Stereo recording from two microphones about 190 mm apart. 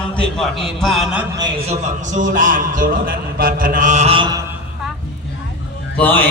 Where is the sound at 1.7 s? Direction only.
40° right (ahead or behind).